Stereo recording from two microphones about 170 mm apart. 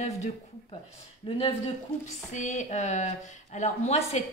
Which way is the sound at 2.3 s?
45° left (ahead or behind).